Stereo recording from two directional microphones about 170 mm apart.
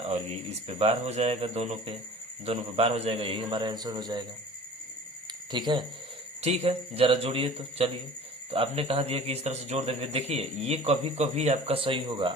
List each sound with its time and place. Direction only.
0.1 s speech: 35° right (ahead or behind)
5.5 s speech: 25° right (ahead or behind)
6.4 s speech: 40° right (ahead or behind)